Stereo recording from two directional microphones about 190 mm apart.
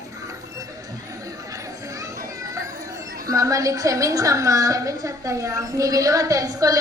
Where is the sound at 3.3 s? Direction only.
15° right (ahead or behind).